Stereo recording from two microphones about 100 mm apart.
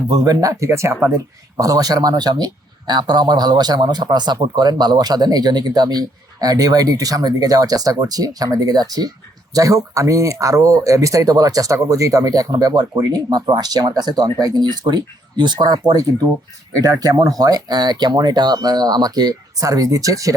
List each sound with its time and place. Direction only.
0.1 s speech: 35° right (ahead or behind)